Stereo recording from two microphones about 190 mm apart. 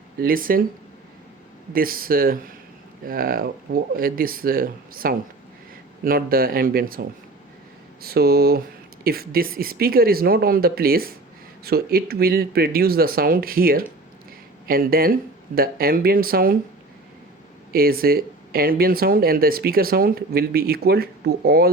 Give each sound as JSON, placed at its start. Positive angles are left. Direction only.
{"t": 0.2, "sound": "speech", "side_deg": -50}
{"t": 1.7, "sound": "speech", "side_deg": -50}
{"t": 8.0, "sound": "a sound", "side_deg": -55}
{"t": 9.0, "sound": "speech", "side_deg": -50}
{"t": 17.7, "sound": "speech", "side_deg": -50}